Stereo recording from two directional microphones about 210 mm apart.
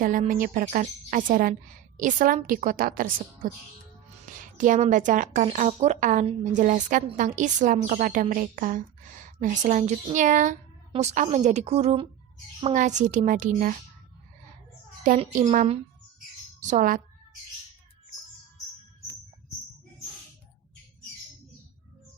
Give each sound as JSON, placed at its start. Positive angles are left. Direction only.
{"t": 0.0, "sound": "a woman's voice", "side_deg": -40}
{"t": 4.5, "sound": "a woman's voice", "side_deg": -40}
{"t": 15.0, "sound": "a woman's voice", "side_deg": -35}